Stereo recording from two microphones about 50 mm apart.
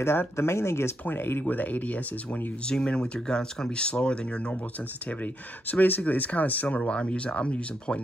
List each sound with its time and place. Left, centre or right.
0.0 s speech: left
1.0 s speech: left
2.6 s speech: centre
5.2 s speech: left
6.8 s speech: centre